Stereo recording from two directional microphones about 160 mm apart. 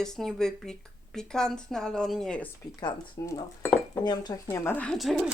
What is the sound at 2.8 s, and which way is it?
Speech, 25° left (ahead or behind).